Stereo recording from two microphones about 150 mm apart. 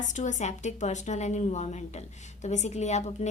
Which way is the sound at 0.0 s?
55° left (ahead or behind).